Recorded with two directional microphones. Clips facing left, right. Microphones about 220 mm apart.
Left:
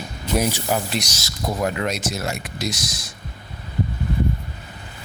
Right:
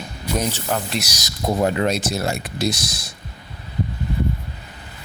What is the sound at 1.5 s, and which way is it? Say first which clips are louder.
Speech: right 5 dB; 30° right (ahead or behind).